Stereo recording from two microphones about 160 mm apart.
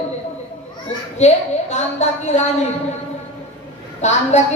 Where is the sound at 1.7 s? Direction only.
45° left (ahead or behind).